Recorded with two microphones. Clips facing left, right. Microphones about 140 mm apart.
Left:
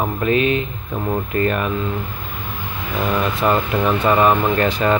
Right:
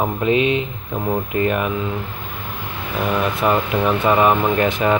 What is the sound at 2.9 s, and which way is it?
Speech, 10° right (ahead or behind).